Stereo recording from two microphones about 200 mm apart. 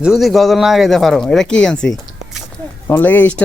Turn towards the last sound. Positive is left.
turn(degrees=10)  # may be behind; listen again after turning